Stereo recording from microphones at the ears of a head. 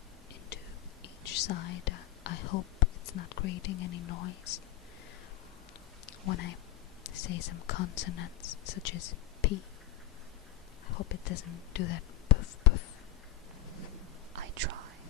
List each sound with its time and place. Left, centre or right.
1.0 s speech: left
6.0 s speech: left
10.9 s whispering: left
14.3 s whispering: right